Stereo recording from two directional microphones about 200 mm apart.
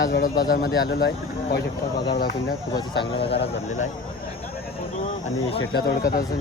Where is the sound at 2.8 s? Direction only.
25° left (ahead or behind).